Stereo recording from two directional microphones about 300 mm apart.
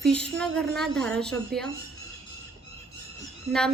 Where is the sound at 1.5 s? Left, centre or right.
Right.